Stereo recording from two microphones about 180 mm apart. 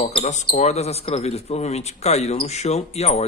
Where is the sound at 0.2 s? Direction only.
40° left (ahead or behind).